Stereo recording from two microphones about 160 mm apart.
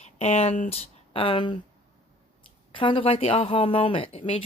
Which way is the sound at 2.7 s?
35° left (ahead or behind).